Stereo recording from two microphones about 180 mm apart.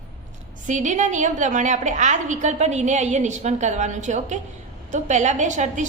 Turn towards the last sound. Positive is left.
turn(degrees=-40)  # may be behind; listen again after turning